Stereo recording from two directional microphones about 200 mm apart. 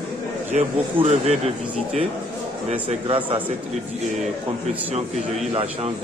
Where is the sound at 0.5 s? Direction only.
30° right (ahead or behind).